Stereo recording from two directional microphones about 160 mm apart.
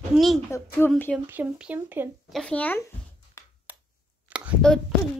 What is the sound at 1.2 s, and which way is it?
Speech, 10° right (ahead or behind).